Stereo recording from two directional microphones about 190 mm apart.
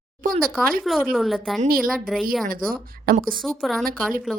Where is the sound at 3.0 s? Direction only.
50° right (ahead or behind).